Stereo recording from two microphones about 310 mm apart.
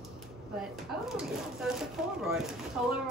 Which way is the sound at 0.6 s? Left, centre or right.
Centre.